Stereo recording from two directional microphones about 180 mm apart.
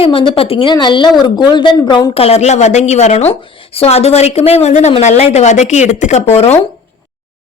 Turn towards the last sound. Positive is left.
turn(degrees=35)  # may be behind; listen again after turning